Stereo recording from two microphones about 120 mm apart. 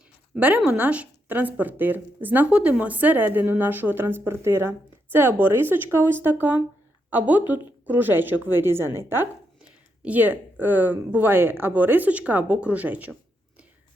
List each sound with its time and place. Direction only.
0.3 s speech: 10° right (ahead or behind)